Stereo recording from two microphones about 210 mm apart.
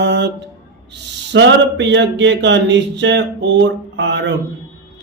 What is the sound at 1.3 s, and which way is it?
Speech, 55° right (ahead or behind).